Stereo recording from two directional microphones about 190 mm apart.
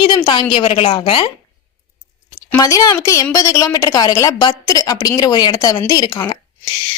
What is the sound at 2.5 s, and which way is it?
A woman's voice, 20° left (ahead or behind).